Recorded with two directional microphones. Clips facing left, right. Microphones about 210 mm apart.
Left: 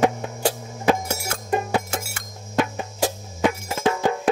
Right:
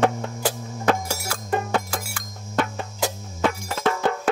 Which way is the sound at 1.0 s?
25° left (ahead or behind).